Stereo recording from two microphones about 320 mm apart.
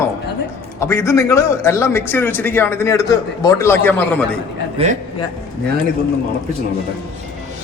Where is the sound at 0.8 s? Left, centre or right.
Centre.